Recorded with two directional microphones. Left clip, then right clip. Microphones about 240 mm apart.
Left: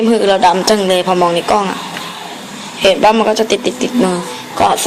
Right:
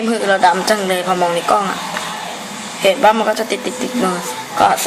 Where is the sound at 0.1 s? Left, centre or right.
Left.